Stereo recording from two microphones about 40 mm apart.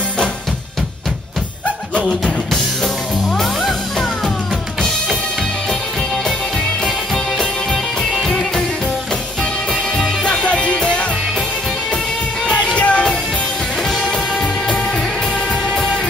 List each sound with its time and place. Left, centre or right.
8.0 s music: centre
9.9 s music: centre
10.4 s music: left
12.7 s music: left
15.7 s music: centre